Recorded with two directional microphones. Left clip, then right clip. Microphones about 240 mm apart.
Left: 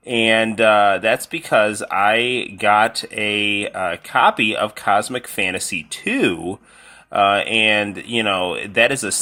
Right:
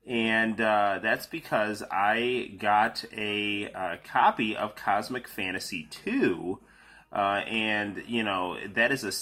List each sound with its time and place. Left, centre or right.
0.1 s speech: left